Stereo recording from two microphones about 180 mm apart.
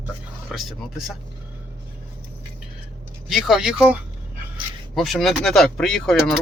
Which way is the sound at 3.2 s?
Centre (ahead or behind).